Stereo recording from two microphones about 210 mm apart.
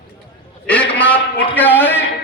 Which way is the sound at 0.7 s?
5° left (ahead or behind).